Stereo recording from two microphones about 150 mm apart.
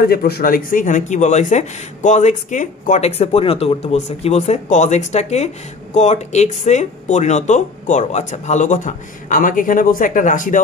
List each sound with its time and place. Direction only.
0.0 s speech: 90° left; by 10.6 s 60° left (ahead or behind)